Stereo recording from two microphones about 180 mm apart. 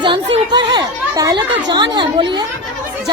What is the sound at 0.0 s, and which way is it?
Speech, 25° right (ahead or behind).